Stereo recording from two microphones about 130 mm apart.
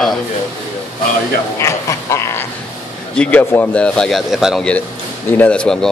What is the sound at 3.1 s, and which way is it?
A man's voice, 10° left (ahead or behind).